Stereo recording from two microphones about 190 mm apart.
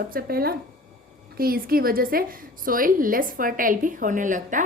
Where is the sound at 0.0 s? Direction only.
50° right (ahead or behind).